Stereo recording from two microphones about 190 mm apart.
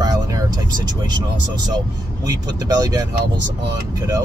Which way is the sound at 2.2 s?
20° right (ahead or behind).